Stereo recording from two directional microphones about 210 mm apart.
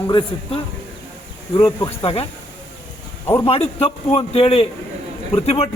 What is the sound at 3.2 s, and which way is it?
Speech, 10° left (ahead or behind).